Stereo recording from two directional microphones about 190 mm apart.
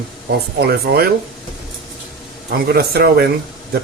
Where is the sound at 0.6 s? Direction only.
55° right (ahead or behind).